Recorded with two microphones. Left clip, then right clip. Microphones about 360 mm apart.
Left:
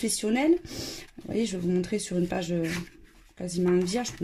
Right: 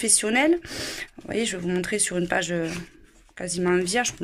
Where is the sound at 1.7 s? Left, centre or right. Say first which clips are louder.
Right 3 dB; right.